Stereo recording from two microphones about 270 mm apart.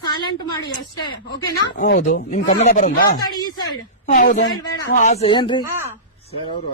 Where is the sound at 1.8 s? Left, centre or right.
Left.